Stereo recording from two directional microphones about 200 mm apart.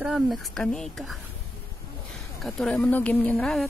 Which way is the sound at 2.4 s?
Centre (ahead or behind).